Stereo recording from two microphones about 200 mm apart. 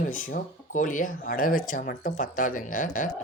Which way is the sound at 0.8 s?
40° left (ahead or behind).